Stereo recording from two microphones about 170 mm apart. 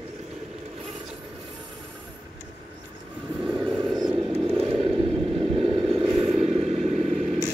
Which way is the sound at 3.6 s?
Centre (ahead or behind).